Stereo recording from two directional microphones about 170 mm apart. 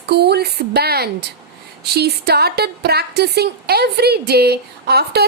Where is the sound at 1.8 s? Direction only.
70° right (ahead or behind).